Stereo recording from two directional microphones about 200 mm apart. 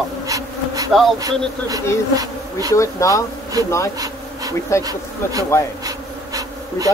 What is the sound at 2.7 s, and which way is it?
Speech, 15° left (ahead or behind).